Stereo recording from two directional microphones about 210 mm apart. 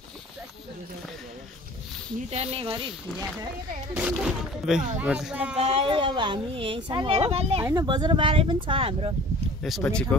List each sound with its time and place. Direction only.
2.3 s speech: 30° right (ahead or behind)
3.9 s speech: 5° right (ahead or behind)
5.6 s speech: 30° right (ahead or behind)
9.6 s speech: centre (ahead or behind)